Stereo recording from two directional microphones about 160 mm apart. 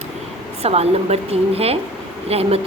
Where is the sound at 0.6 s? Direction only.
40° right (ahead or behind).